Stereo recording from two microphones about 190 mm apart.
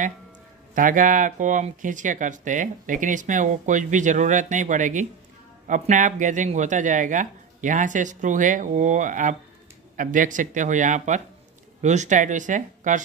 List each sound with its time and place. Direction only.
0.7 s speech: 45° right (ahead or behind)